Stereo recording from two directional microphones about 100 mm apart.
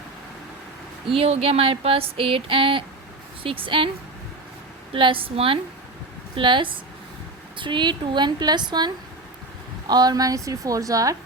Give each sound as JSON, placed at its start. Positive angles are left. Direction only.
{"t": 1.0, "sound": "a sound", "side_deg": -80}
{"t": 3.4, "sound": "a woman's voice", "side_deg": -65}
{"t": 4.9, "sound": "a woman's voice", "side_deg": -60}
{"t": 9.9, "sound": "a woman's voice", "side_deg": -40}